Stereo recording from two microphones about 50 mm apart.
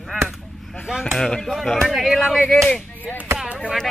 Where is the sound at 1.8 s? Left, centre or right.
Centre.